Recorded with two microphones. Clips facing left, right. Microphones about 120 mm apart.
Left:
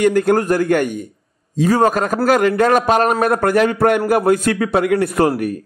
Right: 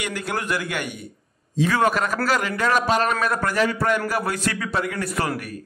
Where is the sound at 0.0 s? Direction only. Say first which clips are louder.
Left 14 dB; 50° left (ahead or behind).